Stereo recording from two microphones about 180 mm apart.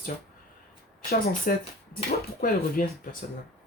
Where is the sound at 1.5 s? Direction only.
50° left (ahead or behind).